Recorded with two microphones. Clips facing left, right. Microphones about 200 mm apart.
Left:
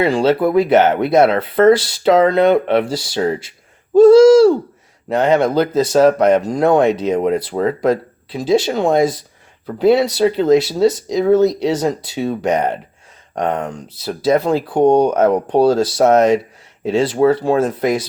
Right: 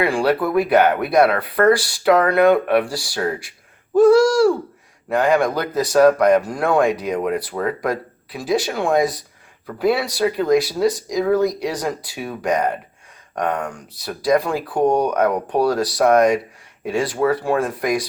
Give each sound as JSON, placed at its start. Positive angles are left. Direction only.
{"t": 0.0, "sound": "speech", "side_deg": 20}